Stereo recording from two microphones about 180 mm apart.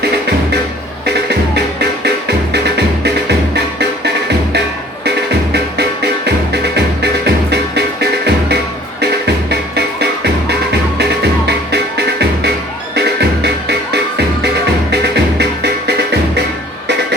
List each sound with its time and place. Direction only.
1.0 s music: 65° right (ahead or behind)
5.7 s music: 70° right (ahead or behind)